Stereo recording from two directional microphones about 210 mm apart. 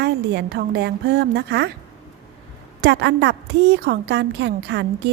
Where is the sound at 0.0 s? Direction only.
50° right (ahead or behind).